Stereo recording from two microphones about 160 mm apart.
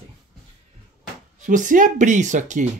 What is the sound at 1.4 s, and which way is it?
Speech, 55° right (ahead or behind).